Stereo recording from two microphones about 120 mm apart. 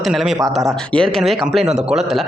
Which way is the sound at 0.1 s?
Centre (ahead or behind).